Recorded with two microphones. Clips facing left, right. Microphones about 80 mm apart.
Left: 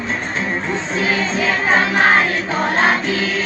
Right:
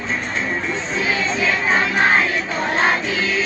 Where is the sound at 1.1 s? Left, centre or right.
Left.